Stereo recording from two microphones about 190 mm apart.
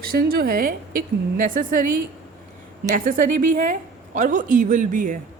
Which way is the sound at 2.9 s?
45° right (ahead or behind).